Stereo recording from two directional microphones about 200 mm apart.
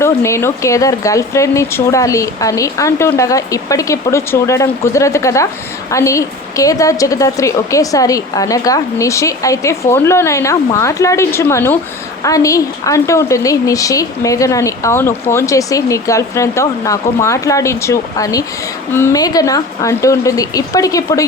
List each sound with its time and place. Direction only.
0.0 s a woman's voice: 15° left (ahead or behind)